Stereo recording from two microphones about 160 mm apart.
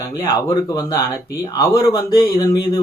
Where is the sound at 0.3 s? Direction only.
20° left (ahead or behind).